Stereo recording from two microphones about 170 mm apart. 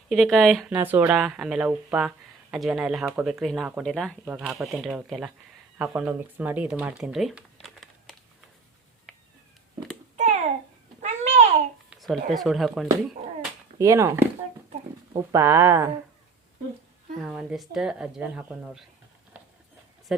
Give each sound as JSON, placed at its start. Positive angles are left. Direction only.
{"t": 0.1, "sound": "speech", "side_deg": 0}
{"t": 0.8, "sound": "speech", "side_deg": -10}
{"t": 10.2, "sound": "babbling", "side_deg": -45}
{"t": 11.9, "sound": "a sound", "side_deg": 0}
{"t": 12.3, "sound": "speech", "side_deg": 0}
{"t": 13.7, "sound": "speech", "side_deg": -20}
{"t": 15.3, "sound": "speech", "side_deg": -15}
{"t": 17.2, "sound": "speech", "side_deg": -5}
{"t": 20.1, "sound": "speech", "side_deg": 0}